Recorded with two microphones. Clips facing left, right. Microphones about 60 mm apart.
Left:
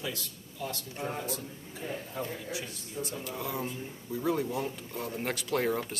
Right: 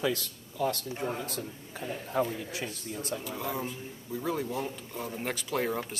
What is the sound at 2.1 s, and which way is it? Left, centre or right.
Speech, right.